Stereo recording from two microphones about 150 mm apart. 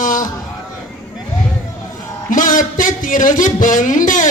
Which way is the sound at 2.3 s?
65° left (ahead or behind).